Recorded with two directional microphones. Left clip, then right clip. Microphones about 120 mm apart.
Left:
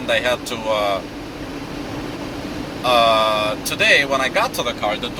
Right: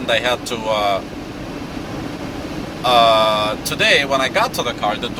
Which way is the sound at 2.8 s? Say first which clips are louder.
Right 2 dB; 45° right (ahead or behind).